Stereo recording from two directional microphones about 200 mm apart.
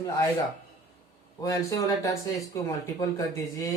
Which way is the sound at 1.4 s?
15° left (ahead or behind).